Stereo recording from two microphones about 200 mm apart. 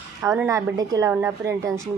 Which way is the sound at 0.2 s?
15° right (ahead or behind).